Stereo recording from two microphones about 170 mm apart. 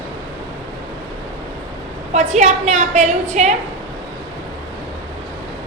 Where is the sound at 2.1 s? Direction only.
40° right (ahead or behind).